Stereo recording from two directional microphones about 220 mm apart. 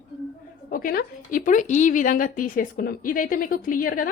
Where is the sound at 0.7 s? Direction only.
40° left (ahead or behind).